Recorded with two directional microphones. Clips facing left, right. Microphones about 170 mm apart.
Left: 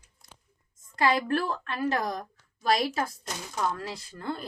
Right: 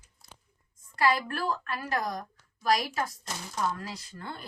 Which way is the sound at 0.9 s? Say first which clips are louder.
Left 2 dB; 25° left (ahead or behind).